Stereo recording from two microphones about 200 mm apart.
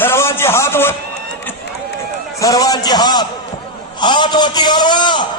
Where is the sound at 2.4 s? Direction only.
20° left (ahead or behind).